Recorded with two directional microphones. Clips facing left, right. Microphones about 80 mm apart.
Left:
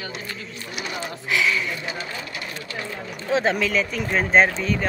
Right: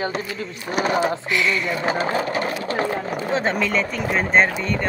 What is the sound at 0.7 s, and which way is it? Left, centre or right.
Speech, right.